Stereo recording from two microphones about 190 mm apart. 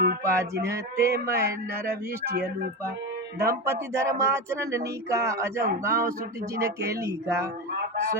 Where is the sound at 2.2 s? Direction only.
55° right (ahead or behind).